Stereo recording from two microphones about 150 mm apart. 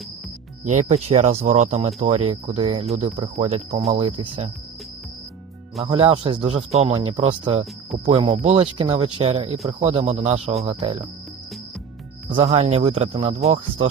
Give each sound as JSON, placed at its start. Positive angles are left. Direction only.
{"t": 0.6, "sound": "speech", "side_deg": -55}
{"t": 5.8, "sound": "speech", "side_deg": -40}
{"t": 12.3, "sound": "speech", "side_deg": -40}